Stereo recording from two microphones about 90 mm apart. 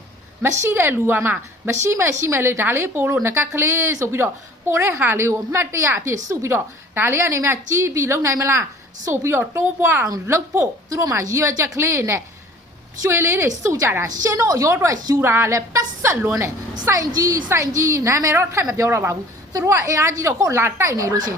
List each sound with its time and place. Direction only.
0.6 s a woman's voice: 25° right (ahead or behind)
15.2 s a woman's voice: 30° right (ahead or behind)